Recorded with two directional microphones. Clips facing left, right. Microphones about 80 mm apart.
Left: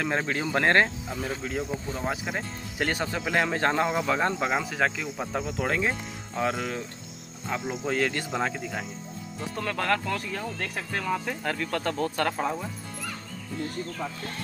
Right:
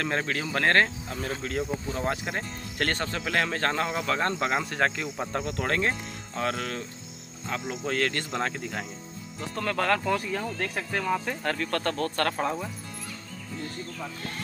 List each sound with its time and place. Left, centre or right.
0.0 s speech: centre